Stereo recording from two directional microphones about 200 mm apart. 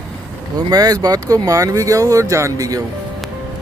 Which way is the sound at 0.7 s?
20° right (ahead or behind).